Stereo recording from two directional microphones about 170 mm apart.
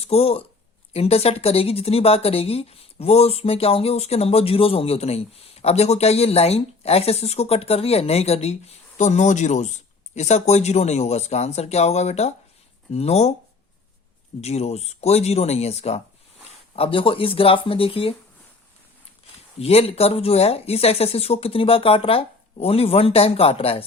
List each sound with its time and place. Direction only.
0.0 s speech: 35° left (ahead or behind)
14.4 s speech: 40° left (ahead or behind)
19.5 s speech: 35° left (ahead or behind)